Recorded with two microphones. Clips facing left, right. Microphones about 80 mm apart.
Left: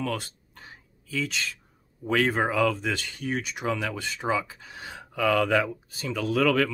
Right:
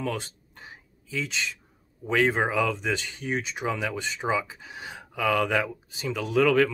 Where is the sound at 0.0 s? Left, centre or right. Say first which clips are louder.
Even; right.